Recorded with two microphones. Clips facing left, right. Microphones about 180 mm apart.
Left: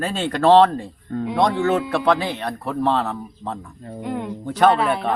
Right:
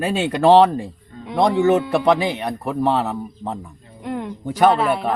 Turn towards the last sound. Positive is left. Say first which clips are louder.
# right 1 dB
turn(degrees=0)  # may be behind; listen again after turning